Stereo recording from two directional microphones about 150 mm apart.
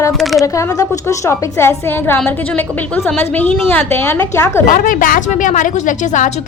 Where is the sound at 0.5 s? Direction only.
20° left (ahead or behind).